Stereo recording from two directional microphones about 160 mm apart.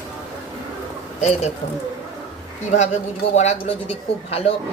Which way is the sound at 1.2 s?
45° left (ahead or behind).